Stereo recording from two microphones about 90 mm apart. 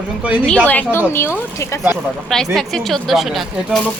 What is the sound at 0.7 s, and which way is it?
Speech, 15° left (ahead or behind).